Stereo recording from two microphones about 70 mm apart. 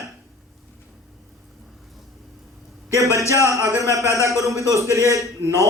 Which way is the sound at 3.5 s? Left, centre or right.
Right.